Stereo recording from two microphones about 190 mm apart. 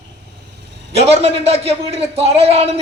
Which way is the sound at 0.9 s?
30° right (ahead or behind).